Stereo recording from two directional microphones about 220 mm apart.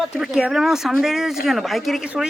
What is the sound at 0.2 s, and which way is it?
A man's voice, centre (ahead or behind).